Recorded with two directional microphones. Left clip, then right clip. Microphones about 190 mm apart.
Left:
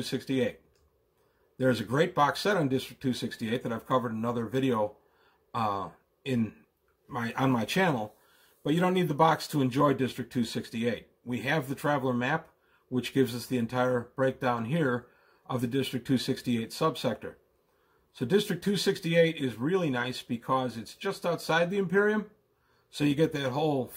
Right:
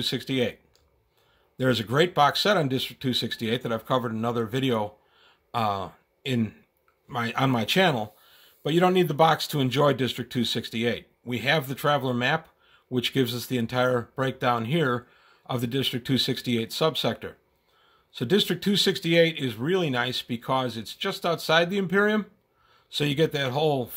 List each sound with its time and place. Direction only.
0.0 s speech: 40° right (ahead or behind)
1.6 s speech: 40° right (ahead or behind)
5.5 s a sound: 45° right (ahead or behind)
7.1 s speech: 40° right (ahead or behind)